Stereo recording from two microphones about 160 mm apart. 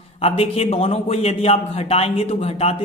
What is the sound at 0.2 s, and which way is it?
A man's voice, 40° left (ahead or behind).